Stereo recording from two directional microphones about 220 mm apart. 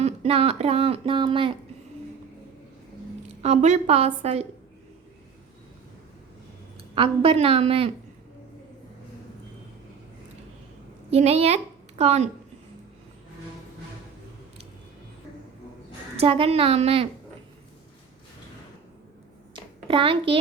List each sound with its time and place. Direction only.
0.0 s speech: 25° right (ahead or behind)
3.4 s speech: 30° right (ahead or behind)
6.9 s speech: 25° right (ahead or behind)
11.1 s a woman's voice: 30° right (ahead or behind)
16.2 s speech: 25° right (ahead or behind)
19.5 s a sound: 25° right (ahead or behind)